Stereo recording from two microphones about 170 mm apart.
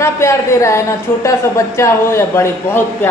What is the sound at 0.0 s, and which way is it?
A man's voice, 15° left (ahead or behind).